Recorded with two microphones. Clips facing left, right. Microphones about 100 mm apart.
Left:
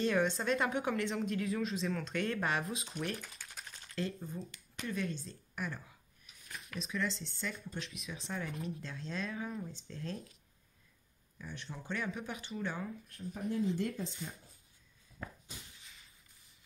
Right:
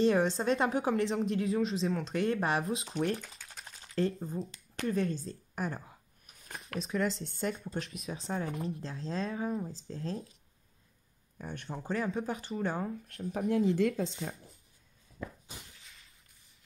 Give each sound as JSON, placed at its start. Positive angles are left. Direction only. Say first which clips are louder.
{"t": 0.0, "sound": "a woman's voice", "louder": "right 5 dB", "side_deg": -30}
{"t": 4.8, "sound": "a sound", "louder": "right 7 dB", "side_deg": -35}
{"t": 6.9, "sound": "a woman's voice", "louder": "right 5 dB", "side_deg": -40}
{"t": 8.0, "sound": "a woman's voice", "louder": "right 5 dB", "side_deg": -35}
{"t": 11.3, "sound": "a woman's voice", "louder": "right 6 dB", "side_deg": -50}
{"t": 13.1, "sound": "speech", "louder": "right 7 dB", "side_deg": -70}